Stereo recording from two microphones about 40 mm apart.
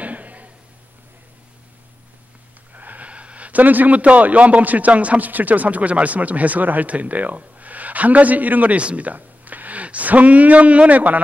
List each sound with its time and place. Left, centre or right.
0.0 s a sound: right
2.7 s wheeze: right
3.1 s a man's voice: right